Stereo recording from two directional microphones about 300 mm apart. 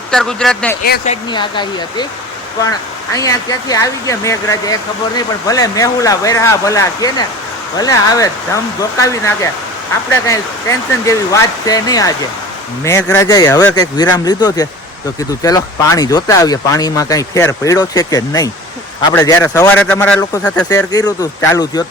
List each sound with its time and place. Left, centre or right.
0.1 s speech: centre
0.9 s speech: left